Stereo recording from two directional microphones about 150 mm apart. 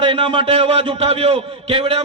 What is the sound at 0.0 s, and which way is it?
Speech, 35° right (ahead or behind).